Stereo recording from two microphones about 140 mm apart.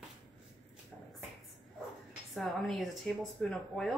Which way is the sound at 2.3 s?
Centre (ahead or behind).